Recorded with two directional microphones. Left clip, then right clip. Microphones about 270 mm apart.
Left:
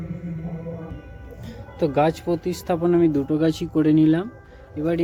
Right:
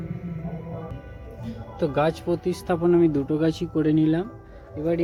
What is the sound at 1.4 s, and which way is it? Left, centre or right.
Speech, centre.